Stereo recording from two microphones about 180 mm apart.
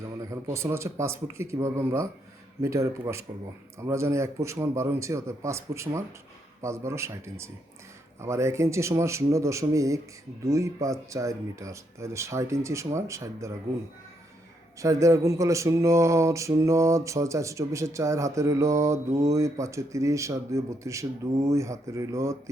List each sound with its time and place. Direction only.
0.2 s speech: 15° right (ahead or behind)
14.8 s speech: 15° right (ahead or behind)